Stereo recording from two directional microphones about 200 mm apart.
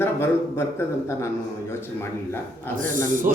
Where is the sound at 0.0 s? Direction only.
10° left (ahead or behind).